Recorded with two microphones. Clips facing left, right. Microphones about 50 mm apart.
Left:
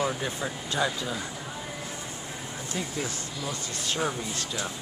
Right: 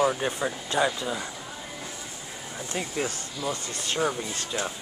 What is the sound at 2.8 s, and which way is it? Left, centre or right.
Speech, right.